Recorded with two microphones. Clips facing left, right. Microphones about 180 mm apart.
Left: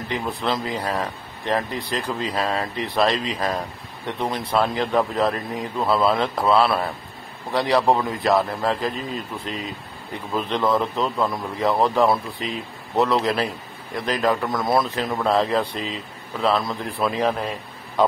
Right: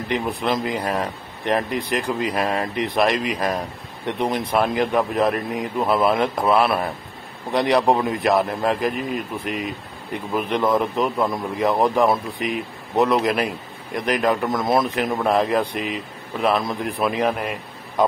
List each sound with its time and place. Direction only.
0.1 s a man's voice: 20° right (ahead or behind)